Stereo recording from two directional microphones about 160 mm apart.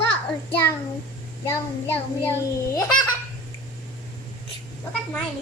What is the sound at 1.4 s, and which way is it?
A child's voice, 15° left (ahead or behind).